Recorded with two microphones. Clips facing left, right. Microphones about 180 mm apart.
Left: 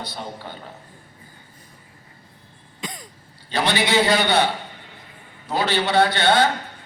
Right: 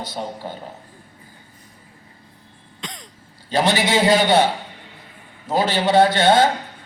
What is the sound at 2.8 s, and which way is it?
Throat clearing, 5° left (ahead or behind).